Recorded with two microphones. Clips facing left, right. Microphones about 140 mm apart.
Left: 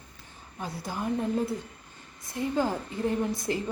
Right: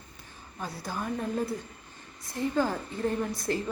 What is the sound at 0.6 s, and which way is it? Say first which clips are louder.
A woman's voice: left 2 dB; 15° left (ahead or behind).